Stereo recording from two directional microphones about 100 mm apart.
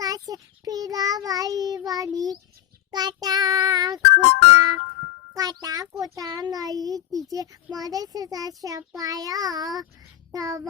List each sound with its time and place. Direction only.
0.0 s child singing: 40° right (ahead or behind)
4.5 s music: 35° right (ahead or behind)
5.3 s a child's voice: 40° right (ahead or behind)